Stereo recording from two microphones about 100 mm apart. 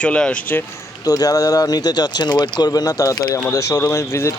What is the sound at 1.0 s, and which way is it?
Speech, 40° left (ahead or behind).